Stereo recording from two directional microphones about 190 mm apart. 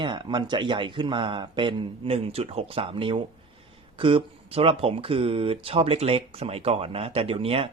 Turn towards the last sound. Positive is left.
turn(degrees=-30)  # may be behind; listen again after turning